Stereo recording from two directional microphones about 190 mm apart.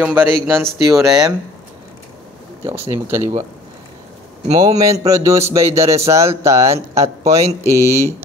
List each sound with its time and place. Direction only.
0.0 s speech: 10° right (ahead or behind)
2.6 s speech: 15° right (ahead or behind)
4.6 s speech: 20° right (ahead or behind)